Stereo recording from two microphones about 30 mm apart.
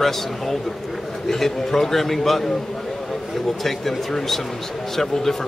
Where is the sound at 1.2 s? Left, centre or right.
Centre.